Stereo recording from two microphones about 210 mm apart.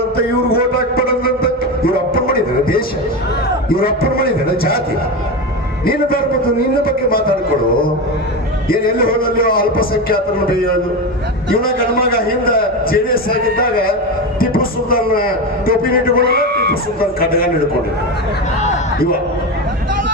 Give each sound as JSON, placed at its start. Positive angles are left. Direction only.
{"t": 0.2, "sound": "a sound", "side_deg": 45}
{"t": 3.7, "sound": "a man's voice", "side_deg": 45}
{"t": 5.8, "sound": "a man's voice", "side_deg": 45}
{"t": 8.7, "sound": "a man's voice", "side_deg": 45}
{"t": 11.6, "sound": "a man's voice", "side_deg": 45}